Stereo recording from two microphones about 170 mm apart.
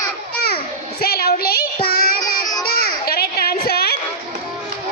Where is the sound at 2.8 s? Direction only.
65° left (ahead or behind).